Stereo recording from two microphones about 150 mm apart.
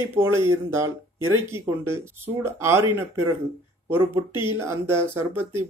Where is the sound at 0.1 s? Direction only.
15° right (ahead or behind).